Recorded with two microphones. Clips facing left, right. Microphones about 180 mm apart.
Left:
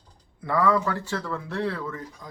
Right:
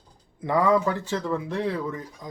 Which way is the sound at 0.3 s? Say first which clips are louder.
Right 2 dB; 20° right (ahead or behind).